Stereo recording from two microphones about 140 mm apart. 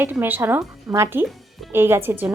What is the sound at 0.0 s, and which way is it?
A woman's voice, 15° right (ahead or behind).